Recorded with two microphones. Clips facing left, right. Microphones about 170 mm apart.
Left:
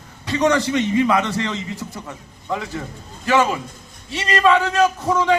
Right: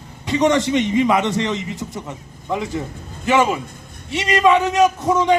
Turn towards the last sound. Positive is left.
turn(degrees=-20)  # may be behind; listen again after turning